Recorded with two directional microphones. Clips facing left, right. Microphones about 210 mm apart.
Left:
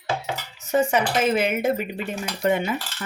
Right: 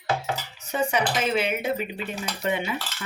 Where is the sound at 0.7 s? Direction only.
45° left (ahead or behind).